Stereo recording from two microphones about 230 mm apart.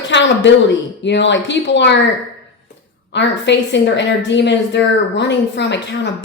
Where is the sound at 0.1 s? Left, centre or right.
Left.